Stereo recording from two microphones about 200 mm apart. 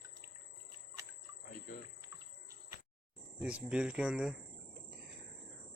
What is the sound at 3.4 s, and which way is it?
Speech, 5° right (ahead or behind).